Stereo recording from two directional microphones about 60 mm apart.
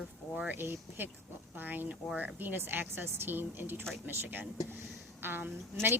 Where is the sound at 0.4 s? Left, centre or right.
Right.